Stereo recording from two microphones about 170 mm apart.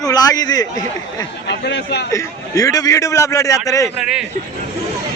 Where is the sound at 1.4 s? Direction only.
90° left.